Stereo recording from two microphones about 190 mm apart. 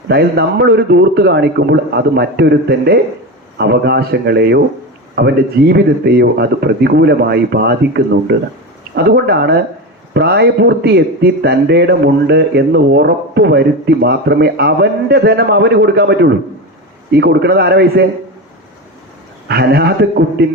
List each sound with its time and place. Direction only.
0.1 s a man's voice: 55° right (ahead or behind)
19.5 s a man's voice: 55° right (ahead or behind)